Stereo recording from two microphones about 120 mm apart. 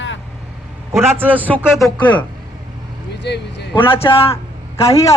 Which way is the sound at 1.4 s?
10° left (ahead or behind).